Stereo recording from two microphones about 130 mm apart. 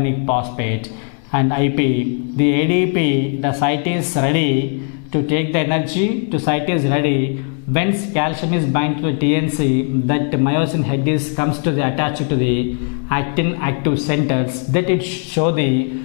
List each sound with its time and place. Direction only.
0.0 s speech: 10° left (ahead or behind)